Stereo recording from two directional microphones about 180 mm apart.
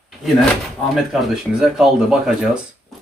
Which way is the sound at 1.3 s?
5° right (ahead or behind).